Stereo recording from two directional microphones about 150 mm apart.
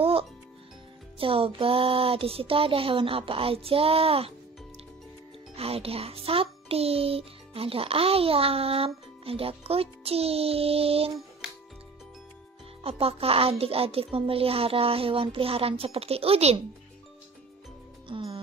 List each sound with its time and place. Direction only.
0.0 s music: 40° right (ahead or behind)
1.1 s a child's voice: 40° right (ahead or behind)
5.6 s a child's voice: 40° right (ahead or behind)
12.8 s a child's voice: 40° right (ahead or behind)
18.0 s music: 35° right (ahead or behind)